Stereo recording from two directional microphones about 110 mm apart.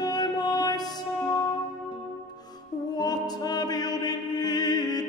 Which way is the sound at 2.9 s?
35° left (ahead or behind).